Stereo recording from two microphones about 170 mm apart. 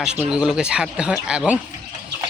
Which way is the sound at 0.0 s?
5° right (ahead or behind).